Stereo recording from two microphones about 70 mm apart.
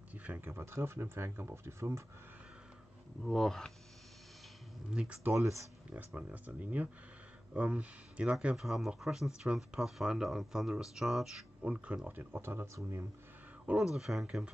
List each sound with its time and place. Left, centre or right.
0.1 s a sound: right
0.5 s speech: right
3.3 s speech: centre
4.9 s speech: centre
5.3 s speech: right
5.9 s speech: right
8.5 s speech: centre
11.6 s speech: centre
12.2 s speech: right
13.8 s speech: centre